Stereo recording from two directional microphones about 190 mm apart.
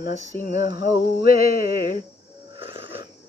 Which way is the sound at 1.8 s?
45° left (ahead or behind).